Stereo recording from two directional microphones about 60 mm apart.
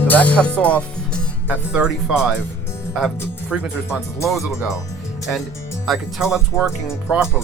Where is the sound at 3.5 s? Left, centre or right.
Centre.